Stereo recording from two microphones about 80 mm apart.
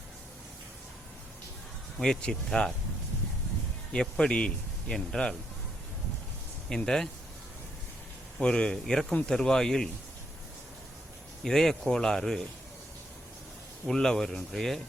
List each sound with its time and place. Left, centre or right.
2.0 s speech: centre
3.9 s speech: centre
6.7 s speech: centre
8.4 s speech: centre
11.4 s speech: centre
13.8 s speech: centre